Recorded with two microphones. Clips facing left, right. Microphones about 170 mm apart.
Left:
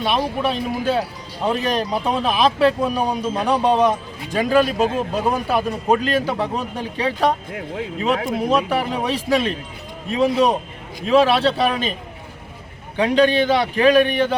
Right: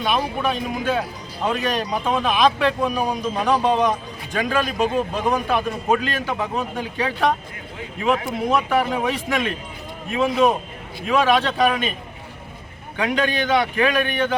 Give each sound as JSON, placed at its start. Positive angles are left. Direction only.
{"t": 0.0, "sound": "a man's voice", "side_deg": 30}
{"t": 7.5, "sound": "speech", "side_deg": 90}
{"t": 8.4, "sound": "a man's voice", "side_deg": 30}
{"t": 13.0, "sound": "a man's voice", "side_deg": 35}